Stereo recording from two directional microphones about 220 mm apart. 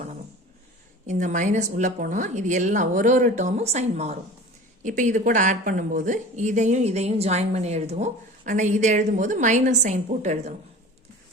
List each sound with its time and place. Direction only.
1.0 s speech: 35° right (ahead or behind)